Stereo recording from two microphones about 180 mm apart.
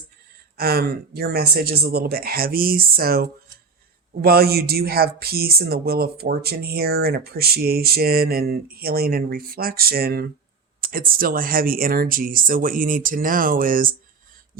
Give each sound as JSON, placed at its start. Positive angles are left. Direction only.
{"t": 0.5, "sound": "speech", "side_deg": -55}